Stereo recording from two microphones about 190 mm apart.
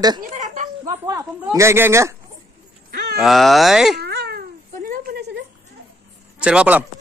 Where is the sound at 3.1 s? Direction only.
Centre (ahead or behind).